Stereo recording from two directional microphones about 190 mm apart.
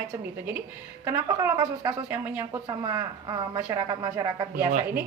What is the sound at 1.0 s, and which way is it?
A woman's voice, 15° right (ahead or behind).